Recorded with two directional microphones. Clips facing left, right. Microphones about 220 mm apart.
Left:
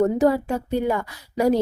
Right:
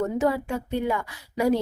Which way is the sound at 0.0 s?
40° left (ahead or behind).